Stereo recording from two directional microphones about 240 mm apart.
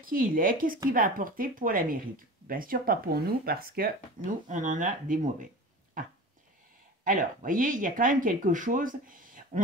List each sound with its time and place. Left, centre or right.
0.0 s speech: right
7.1 s speech: right